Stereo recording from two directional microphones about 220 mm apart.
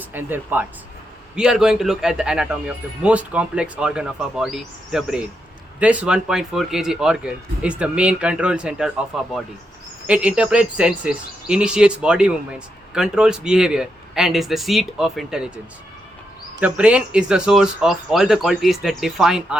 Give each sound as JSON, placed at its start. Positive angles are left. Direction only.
{"t": 0.0, "sound": "speech", "side_deg": -10}
{"t": 16.6, "sound": "speech", "side_deg": -5}